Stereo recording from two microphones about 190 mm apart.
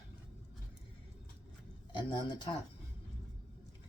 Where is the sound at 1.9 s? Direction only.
25° left (ahead or behind).